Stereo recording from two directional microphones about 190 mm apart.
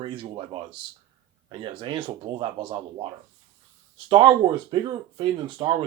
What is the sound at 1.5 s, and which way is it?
Speech, 25° right (ahead or behind).